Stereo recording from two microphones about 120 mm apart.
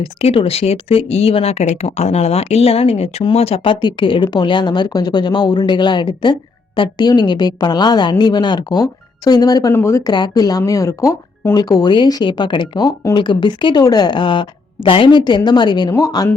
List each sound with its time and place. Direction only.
0.0 s a woman's voice: 55° left (ahead or behind); by 10.1 s 25° left (ahead or behind)
10.1 s a woman's voice: 35° left (ahead or behind)